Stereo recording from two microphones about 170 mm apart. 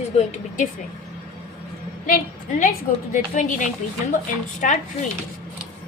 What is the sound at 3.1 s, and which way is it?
A woman's voice, 50° left (ahead or behind).